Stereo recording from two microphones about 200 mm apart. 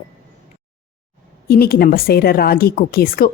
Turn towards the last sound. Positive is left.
turn(degrees=45)  # may be behind; listen again after turning